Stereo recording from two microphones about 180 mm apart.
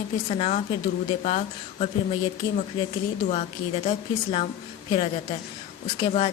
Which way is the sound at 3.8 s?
35° left (ahead or behind).